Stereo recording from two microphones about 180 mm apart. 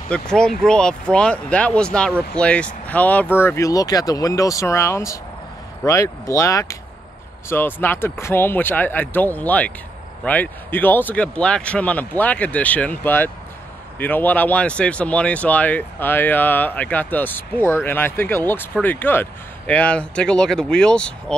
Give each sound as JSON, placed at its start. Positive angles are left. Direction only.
{"t": 0.1, "sound": "speech", "side_deg": 5}